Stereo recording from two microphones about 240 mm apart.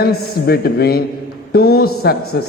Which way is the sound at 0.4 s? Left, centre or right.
Left.